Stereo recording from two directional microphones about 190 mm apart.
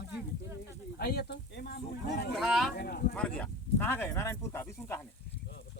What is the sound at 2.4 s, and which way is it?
Speech, centre (ahead or behind).